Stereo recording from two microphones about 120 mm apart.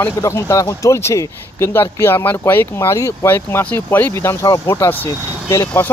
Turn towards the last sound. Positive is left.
turn(degrees=30)  # may be behind; listen again after turning